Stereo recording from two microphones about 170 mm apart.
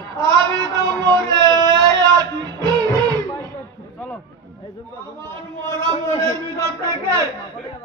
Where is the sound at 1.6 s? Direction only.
20° right (ahead or behind).